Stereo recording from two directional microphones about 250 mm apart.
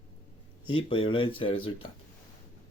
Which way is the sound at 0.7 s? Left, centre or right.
Left.